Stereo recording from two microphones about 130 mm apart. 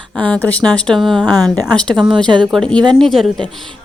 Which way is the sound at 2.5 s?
5° left (ahead or behind).